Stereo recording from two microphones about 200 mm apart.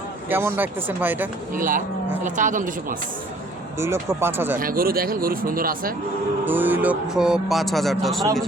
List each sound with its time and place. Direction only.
0.3 s speech: 10° right (ahead or behind)
1.5 s speech: 45° right (ahead or behind)
3.8 s speech: 15° right (ahead or behind)
4.6 s speech: 45° right (ahead or behind)
6.4 s speech: 10° right (ahead or behind)